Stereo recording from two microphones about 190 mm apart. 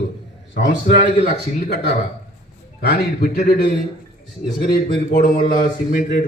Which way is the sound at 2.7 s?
55° left (ahead or behind).